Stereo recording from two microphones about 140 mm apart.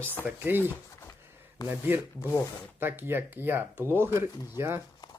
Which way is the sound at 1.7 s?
15° right (ahead or behind).